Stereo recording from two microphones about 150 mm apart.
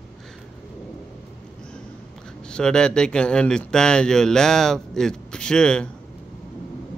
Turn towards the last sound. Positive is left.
turn(degrees=5)  # may be behind; listen again after turning